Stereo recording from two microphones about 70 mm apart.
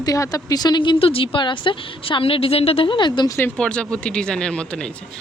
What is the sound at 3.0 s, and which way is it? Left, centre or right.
Speech, left.